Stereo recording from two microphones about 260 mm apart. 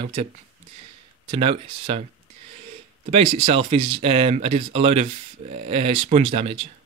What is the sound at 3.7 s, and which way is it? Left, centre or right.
Speech, right.